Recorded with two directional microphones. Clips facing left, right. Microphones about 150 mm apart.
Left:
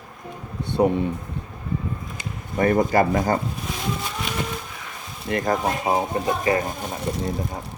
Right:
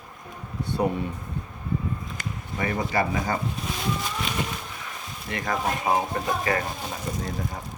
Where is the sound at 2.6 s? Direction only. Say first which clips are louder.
Left 8 dB; 45° left (ahead or behind).